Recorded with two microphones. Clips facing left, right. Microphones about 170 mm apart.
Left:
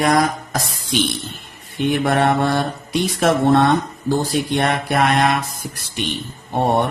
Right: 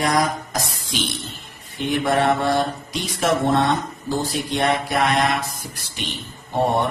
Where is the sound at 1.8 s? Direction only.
60° left (ahead or behind).